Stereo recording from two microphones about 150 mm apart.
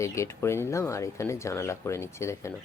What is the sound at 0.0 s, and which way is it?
Speech, 20° left (ahead or behind).